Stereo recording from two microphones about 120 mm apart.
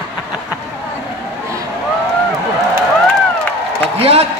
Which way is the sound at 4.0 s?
55° right (ahead or behind).